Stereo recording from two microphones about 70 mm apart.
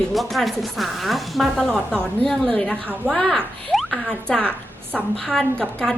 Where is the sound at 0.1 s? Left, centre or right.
Centre.